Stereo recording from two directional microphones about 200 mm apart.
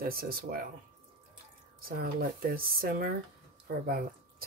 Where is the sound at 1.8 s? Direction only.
50° right (ahead or behind).